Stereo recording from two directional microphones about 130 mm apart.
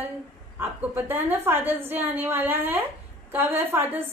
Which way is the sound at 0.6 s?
15° right (ahead or behind).